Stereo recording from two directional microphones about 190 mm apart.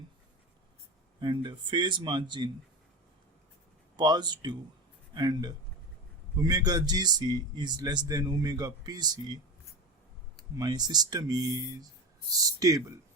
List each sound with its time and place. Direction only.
1.2 s a man's voice: 25° right (ahead or behind)
3.9 s a man's voice: 20° right (ahead or behind)
10.6 s a man's voice: 20° right (ahead or behind)